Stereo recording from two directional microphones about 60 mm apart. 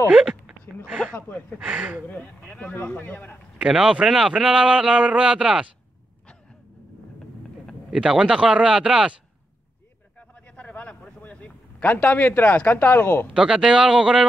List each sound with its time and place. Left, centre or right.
0.1 s speech: centre
1.7 s speech: right
2.7 s a man's voice: left
3.6 s speech: centre
4.1 s speech: centre
7.9 s speech: centre
10.5 s vehicle: left
11.1 s speech: left
13.3 s speech: centre